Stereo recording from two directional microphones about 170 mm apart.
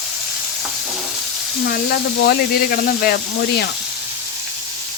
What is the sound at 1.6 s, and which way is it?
Speech, 65° left (ahead or behind).